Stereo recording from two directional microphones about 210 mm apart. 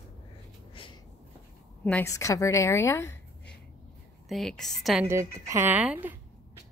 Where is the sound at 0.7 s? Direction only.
25° left (ahead or behind).